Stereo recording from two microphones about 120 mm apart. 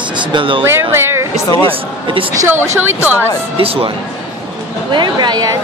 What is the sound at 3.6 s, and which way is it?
Speech, 50° right (ahead or behind).